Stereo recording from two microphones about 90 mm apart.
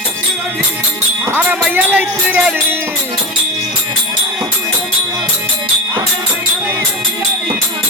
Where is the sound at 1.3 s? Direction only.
10° right (ahead or behind).